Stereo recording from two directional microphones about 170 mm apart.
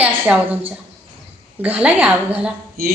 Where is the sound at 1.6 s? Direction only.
10° right (ahead or behind).